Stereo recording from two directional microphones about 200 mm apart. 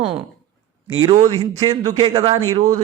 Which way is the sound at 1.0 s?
20° right (ahead or behind).